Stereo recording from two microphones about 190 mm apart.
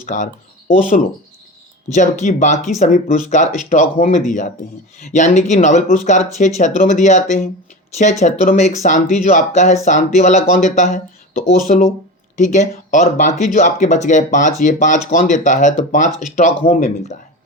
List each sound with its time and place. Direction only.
0.0 s speech: 40° left (ahead or behind)